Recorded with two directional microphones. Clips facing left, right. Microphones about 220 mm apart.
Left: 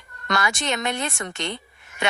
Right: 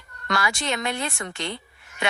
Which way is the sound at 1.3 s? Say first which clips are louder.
Left 1 dB; 20° left (ahead or behind).